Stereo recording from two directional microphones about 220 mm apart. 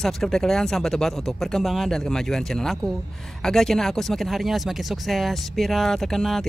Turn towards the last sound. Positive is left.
turn(degrees=0)  # may be behind; listen again after turning